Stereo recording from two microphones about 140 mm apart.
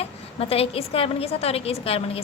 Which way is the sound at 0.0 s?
45° left (ahead or behind).